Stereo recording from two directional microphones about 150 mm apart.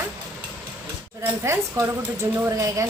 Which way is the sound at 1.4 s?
20° right (ahead or behind).